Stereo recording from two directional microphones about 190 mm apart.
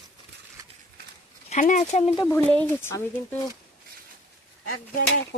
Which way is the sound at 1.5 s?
40° left (ahead or behind).